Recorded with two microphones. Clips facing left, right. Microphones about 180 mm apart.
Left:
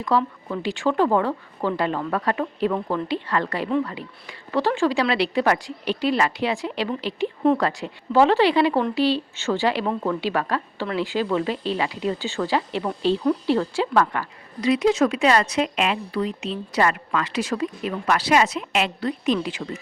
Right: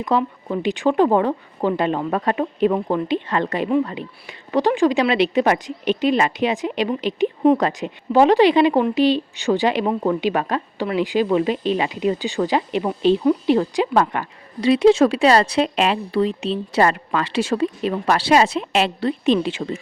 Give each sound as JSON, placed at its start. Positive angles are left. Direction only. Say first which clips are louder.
{"t": 0.0, "sound": "speech", "louder": "right 2 dB", "side_deg": -20}